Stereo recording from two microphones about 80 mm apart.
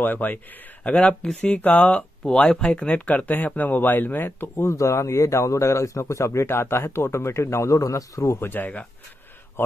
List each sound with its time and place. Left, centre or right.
0.0 s speech: left
8.4 s speech: left